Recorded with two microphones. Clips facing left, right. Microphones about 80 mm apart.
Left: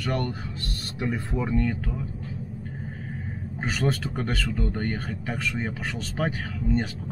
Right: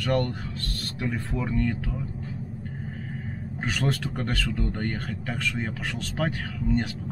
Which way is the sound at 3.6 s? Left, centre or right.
Centre.